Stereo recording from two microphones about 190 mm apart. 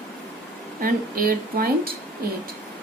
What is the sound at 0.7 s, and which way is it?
A woman's voice, 50° right (ahead or behind).